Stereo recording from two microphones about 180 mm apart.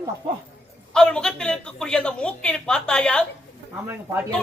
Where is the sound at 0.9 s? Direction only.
5° left (ahead or behind).